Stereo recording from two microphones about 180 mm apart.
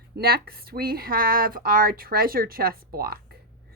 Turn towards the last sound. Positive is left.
turn(degrees=-55)  # may be behind; listen again after turning